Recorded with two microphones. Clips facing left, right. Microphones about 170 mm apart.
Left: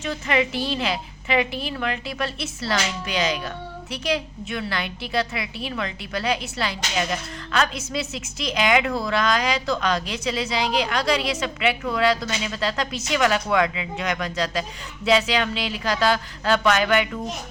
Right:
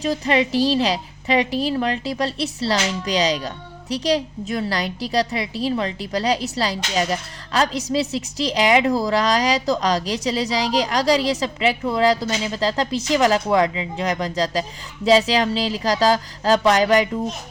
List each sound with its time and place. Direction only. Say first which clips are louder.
0.0 s a woman's voice: right 4 dB; 35° right (ahead or behind)